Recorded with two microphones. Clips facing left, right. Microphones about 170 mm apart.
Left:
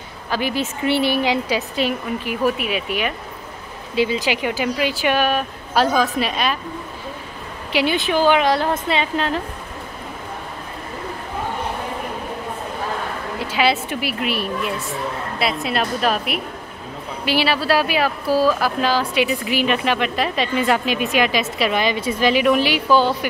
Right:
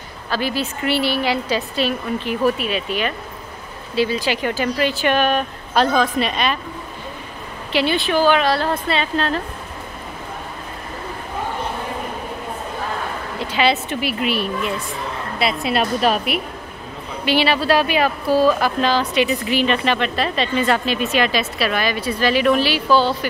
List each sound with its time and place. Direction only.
0.3 s speech: 20° left (ahead or behind)
7.7 s speech: 15° left (ahead or behind)
13.4 s a woman's voice: 5° left (ahead or behind)